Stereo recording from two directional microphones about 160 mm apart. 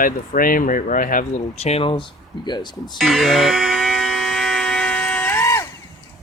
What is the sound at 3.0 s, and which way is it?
Electric toothbrush, centre (ahead or behind).